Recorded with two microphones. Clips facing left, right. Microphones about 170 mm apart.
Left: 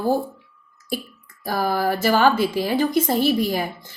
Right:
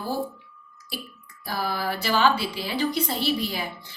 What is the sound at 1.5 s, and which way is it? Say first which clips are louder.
A woman's voice: left 7 dB; 45° left (ahead or behind).